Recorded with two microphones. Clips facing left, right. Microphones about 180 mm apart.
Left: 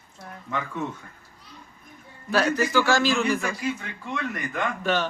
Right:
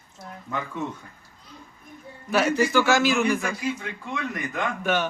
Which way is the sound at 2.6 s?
15° right (ahead or behind).